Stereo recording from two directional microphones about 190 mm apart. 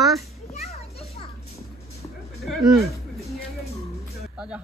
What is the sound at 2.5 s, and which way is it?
Speech, centre (ahead or behind).